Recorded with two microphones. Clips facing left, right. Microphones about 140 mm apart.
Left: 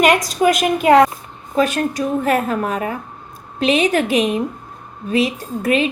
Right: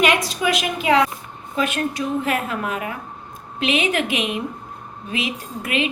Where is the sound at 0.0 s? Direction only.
45° left (ahead or behind).